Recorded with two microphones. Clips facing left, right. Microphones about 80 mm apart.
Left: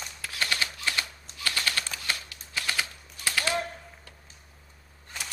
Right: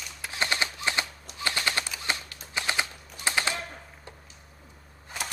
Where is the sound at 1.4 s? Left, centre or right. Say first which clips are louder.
Right 2 dB; right.